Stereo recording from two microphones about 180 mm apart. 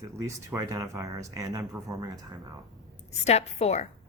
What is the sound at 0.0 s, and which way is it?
Speech, 20° right (ahead or behind).